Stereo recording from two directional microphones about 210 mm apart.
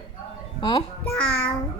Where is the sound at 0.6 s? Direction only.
20° left (ahead or behind).